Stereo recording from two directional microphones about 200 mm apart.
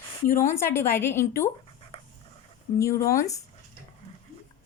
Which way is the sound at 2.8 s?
15° left (ahead or behind).